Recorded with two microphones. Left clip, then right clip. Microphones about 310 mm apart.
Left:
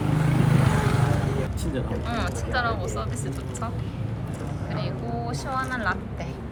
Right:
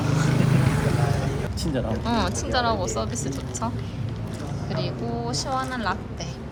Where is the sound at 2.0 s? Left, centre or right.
Centre.